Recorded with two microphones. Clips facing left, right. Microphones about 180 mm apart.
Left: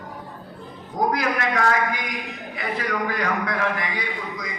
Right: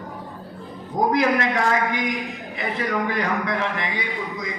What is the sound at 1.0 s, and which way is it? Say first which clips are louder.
A man's voice: right 3 dB; 25° right (ahead or behind).